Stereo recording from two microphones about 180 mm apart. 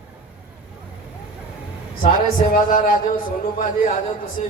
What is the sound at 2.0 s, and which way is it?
A man's voice, 50° left (ahead or behind).